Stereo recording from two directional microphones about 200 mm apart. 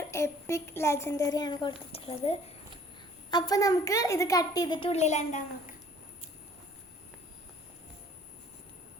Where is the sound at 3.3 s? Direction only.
20° left (ahead or behind); by 5.4 s 35° left (ahead or behind).